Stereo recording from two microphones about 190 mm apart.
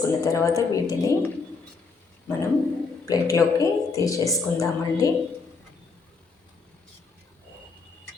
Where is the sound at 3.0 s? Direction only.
15° left (ahead or behind).